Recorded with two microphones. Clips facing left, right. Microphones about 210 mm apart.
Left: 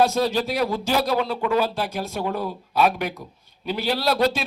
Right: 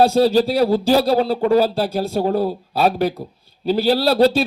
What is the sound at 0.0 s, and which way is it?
A man's voice, 35° right (ahead or behind).